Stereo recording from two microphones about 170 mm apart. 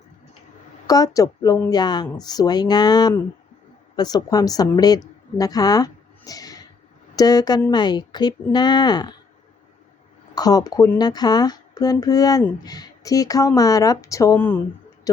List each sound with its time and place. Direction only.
0.9 s a woman's voice: 20° left (ahead or behind)
10.3 s speech: 20° left (ahead or behind)
15.1 s a sound: 20° left (ahead or behind)